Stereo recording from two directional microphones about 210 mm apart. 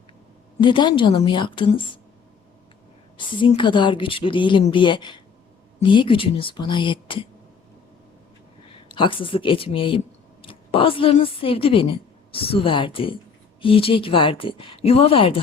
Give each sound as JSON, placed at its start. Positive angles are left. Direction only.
{"t": 0.6, "sound": "speech", "side_deg": 20}
{"t": 3.2, "sound": "speech", "side_deg": 25}
{"t": 8.9, "sound": "a woman's voice", "side_deg": 25}